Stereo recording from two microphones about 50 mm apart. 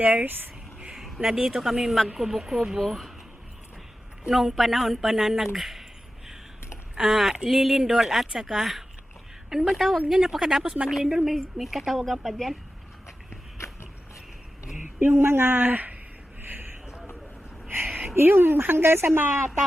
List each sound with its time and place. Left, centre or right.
0.0 s speech: right
0.9 s a sound: centre
1.3 s speech: centre
4.3 s speech: centre
6.9 s speech: centre
14.9 s speech: right
16.4 s a sound: right
17.7 s a sound: right
18.1 s speech: right